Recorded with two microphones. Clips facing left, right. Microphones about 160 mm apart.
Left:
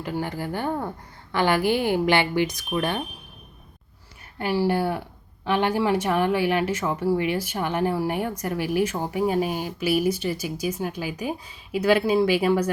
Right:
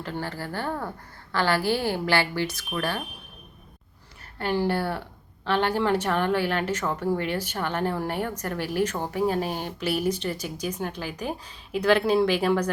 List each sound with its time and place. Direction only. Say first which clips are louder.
0.0 s speech: left 4 dB; 15° left (ahead or behind)
4.4 s speech: left 2 dB; 10° left (ahead or behind)